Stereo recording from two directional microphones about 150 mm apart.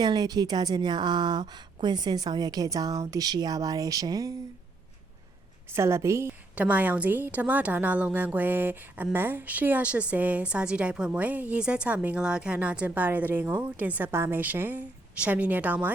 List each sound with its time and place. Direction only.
0.0 s a woman's voice: 30° right (ahead or behind)
5.6 s a woman's voice: 15° right (ahead or behind)